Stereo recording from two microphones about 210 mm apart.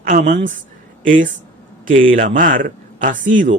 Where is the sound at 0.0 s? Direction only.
40° right (ahead or behind).